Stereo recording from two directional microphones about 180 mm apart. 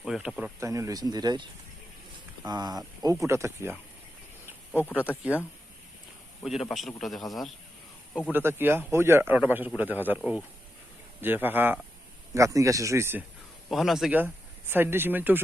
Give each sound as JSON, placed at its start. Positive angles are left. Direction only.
{"t": 0.0, "sound": "speech", "side_deg": 0}
{"t": 0.6, "sound": "speech", "side_deg": -15}
{"t": 2.5, "sound": "speech", "side_deg": -20}
{"t": 6.4, "sound": "a man's voice", "side_deg": 0}
{"t": 8.3, "sound": "a man's voice", "side_deg": -10}
{"t": 13.7, "sound": "a man's voice", "side_deg": 0}